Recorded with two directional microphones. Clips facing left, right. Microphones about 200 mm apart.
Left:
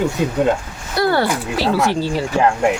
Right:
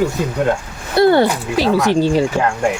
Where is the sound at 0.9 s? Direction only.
20° right (ahead or behind).